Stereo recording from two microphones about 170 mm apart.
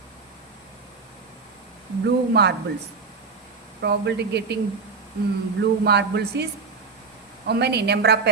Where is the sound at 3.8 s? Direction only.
80° right.